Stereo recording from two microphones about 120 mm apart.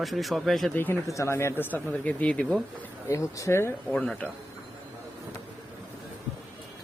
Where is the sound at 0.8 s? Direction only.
20° left (ahead or behind).